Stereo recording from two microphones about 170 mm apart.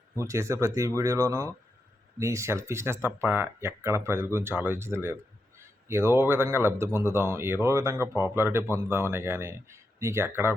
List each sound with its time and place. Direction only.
0.2 s speech: 15° right (ahead or behind)